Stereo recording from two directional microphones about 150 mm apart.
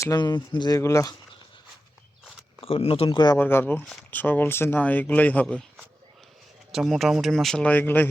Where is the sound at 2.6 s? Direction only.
40° left (ahead or behind).